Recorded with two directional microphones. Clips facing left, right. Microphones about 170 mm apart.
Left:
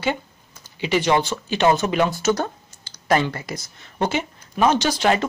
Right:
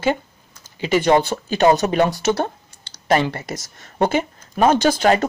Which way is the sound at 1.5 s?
40° right (ahead or behind).